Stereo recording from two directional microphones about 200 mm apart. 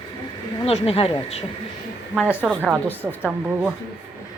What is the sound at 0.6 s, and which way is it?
Speech, 30° left (ahead or behind).